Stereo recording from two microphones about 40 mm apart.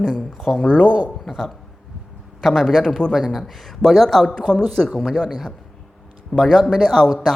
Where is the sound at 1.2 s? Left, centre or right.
Centre.